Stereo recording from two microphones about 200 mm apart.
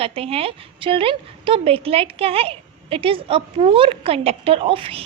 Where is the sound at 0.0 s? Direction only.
30° right (ahead or behind).